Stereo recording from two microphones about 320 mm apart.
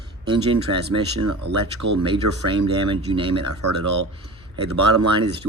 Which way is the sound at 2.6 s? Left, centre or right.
Centre.